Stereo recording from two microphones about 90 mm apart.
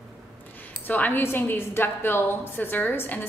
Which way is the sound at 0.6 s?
20° left (ahead or behind).